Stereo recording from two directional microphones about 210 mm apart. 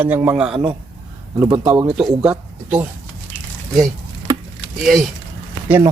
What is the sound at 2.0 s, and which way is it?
Speech, 5° right (ahead or behind).